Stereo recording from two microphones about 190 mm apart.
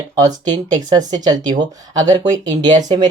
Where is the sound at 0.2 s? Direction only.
20° right (ahead or behind).